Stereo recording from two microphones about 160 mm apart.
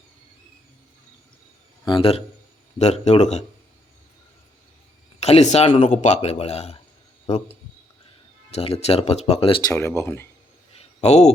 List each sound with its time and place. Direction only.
2.0 s speech: 35° left (ahead or behind)
5.2 s speech: 45° left (ahead or behind); by 10.2 s 15° left (ahead or behind)
10.8 s a sound: 45° left (ahead or behind)